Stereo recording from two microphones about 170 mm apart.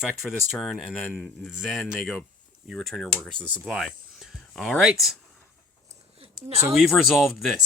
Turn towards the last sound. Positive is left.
turn(degrees=0)  # may be behind; listen again after turning